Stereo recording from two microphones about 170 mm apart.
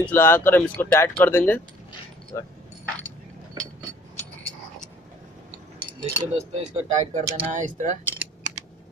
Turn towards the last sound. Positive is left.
turn(degrees=-45)  # may be behind; listen again after turning